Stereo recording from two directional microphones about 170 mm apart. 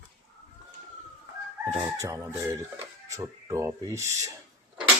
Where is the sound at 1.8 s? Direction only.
15° right (ahead or behind).